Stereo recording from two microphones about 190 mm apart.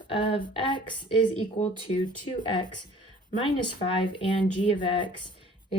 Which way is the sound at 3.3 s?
25° left (ahead or behind).